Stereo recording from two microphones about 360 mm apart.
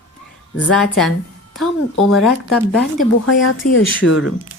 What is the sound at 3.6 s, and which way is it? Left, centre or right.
Speech, left.